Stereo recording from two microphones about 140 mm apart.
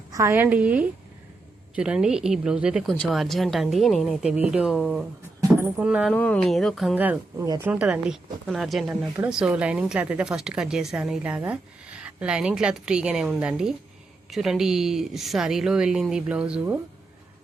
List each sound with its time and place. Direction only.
0.1 s speech: 20° right (ahead or behind)
5.4 s a sound: 20° right (ahead or behind)
5.7 s speech: 5° right (ahead or behind)
6.1 s speech: 10° left (ahead or behind)
6.9 s speech: 10° right (ahead or behind)